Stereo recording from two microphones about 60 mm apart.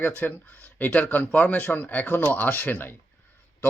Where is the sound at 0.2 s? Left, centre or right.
Left.